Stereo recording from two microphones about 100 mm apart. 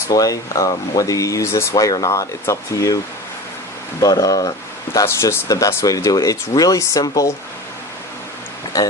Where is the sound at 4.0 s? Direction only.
35° left (ahead or behind).